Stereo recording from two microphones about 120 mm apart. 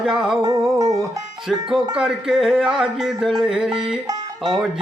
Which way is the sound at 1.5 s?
5° right (ahead or behind).